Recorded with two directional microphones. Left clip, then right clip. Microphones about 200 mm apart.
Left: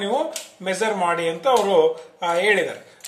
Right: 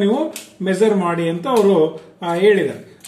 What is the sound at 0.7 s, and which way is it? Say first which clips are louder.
Speech: right 4 dB; 15° left (ahead or behind).